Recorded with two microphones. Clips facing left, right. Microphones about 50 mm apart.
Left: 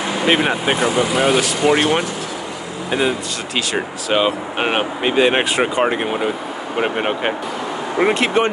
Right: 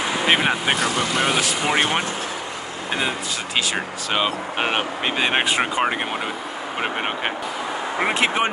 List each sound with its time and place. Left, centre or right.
0.2 s speech: centre
0.7 s speech: centre
1.1 s speech: centre